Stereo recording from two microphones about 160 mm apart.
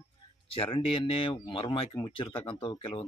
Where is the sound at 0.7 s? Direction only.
35° left (ahead or behind).